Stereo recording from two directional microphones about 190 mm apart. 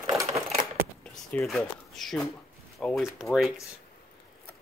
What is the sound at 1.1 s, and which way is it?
Speech, centre (ahead or behind).